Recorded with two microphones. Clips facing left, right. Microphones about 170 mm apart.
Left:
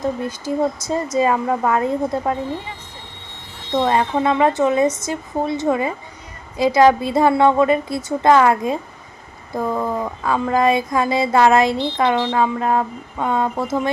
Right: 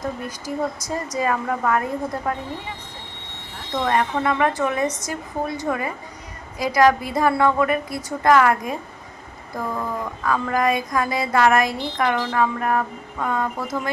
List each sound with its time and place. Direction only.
0.0 s speech: 25° left (ahead or behind)
3.7 s speech: 25° left (ahead or behind)
10.2 s speech: 25° left (ahead or behind)